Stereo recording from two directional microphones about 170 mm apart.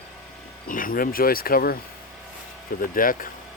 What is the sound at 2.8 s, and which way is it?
Speech, 55° left (ahead or behind).